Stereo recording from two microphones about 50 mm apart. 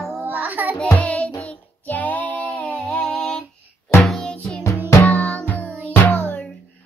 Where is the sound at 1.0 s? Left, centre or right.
Left.